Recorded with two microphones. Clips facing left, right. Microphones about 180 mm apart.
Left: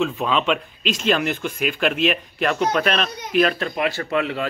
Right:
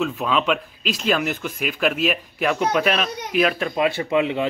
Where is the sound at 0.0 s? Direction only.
Centre (ahead or behind).